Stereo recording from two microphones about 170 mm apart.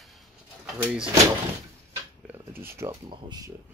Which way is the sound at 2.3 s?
15° right (ahead or behind).